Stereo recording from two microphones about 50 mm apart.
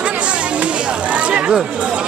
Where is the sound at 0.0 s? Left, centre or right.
Right.